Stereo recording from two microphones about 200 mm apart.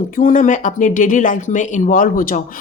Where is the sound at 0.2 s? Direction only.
40° left (ahead or behind).